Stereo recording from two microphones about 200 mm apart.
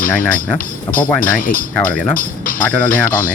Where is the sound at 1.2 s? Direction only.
45° left (ahead or behind).